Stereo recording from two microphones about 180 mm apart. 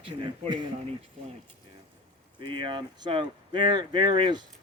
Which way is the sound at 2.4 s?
25° right (ahead or behind).